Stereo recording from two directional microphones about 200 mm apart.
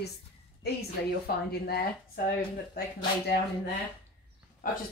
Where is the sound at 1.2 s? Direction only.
50° left (ahead or behind).